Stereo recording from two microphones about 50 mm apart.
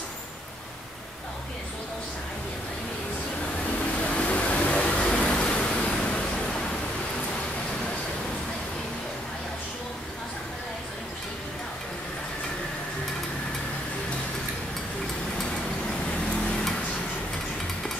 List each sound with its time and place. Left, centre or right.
4.0 s vehicle: left
5.1 s pink noise: centre